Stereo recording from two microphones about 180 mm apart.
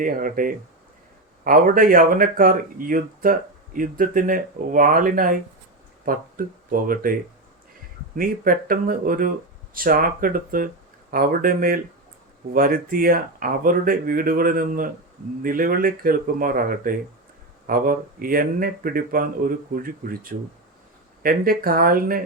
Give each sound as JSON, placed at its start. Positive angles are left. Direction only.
{"t": 0.0, "sound": "speech", "side_deg": -50}
{"t": 8.1, "sound": "speech", "side_deg": -50}